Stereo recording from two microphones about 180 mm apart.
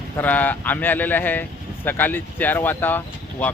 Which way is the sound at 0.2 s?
10° left (ahead or behind).